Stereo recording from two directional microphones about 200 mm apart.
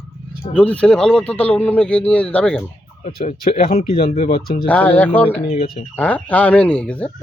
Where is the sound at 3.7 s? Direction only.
30° left (ahead or behind).